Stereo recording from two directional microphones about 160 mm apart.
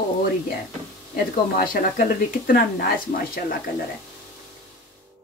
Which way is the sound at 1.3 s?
60° left (ahead or behind).